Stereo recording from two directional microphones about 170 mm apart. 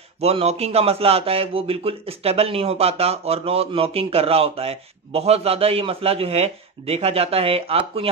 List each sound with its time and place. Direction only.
0.2 s a man's voice: 35° right (ahead or behind)